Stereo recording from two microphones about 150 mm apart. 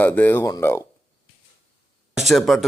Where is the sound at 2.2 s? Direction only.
Centre (ahead or behind).